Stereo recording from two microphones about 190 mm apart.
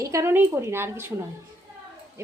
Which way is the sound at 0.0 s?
15° right (ahead or behind).